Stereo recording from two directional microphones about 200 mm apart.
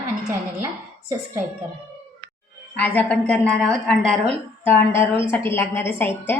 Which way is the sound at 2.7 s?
10° left (ahead or behind).